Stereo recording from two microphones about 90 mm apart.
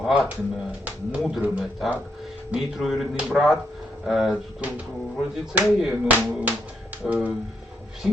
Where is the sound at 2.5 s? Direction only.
Centre (ahead or behind).